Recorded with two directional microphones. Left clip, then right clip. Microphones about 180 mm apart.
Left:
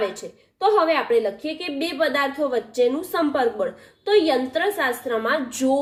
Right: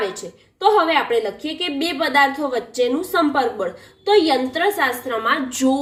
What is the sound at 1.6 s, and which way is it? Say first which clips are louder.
A woman's voice: right 2 dB; 45° left (ahead or behind).